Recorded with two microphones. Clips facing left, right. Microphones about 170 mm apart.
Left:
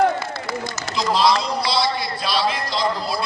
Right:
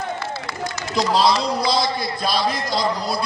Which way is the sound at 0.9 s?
35° right (ahead or behind).